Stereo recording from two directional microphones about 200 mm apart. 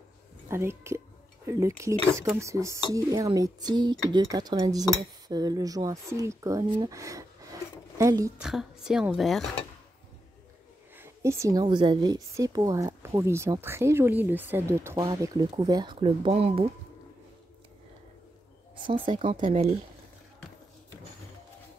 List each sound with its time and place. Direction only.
0.5 s a woman's voice: 15° right (ahead or behind)
8.4 s a woman's voice: centre (ahead or behind)
11.0 s a woman's voice: 15° right (ahead or behind); by 16.6 s 30° right (ahead or behind)
18.9 s speech: 25° right (ahead or behind)